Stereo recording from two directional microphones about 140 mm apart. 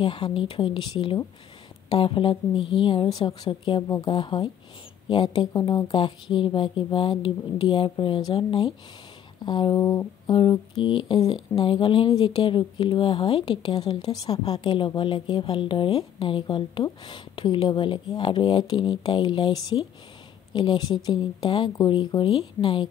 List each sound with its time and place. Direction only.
0.0 s speech: 35° left (ahead or behind)